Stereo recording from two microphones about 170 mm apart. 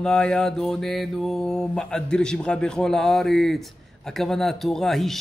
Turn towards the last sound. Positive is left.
turn(degrees=0)  # may be behind; listen again after turning